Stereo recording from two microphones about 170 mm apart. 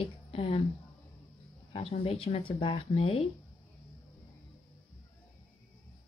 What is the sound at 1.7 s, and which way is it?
Speech, 35° left (ahead or behind).